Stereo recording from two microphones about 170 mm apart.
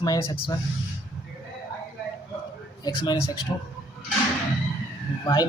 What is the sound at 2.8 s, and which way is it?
Speech, 25° left (ahead or behind).